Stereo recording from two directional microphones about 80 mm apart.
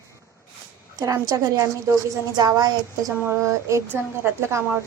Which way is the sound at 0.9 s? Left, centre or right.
Right.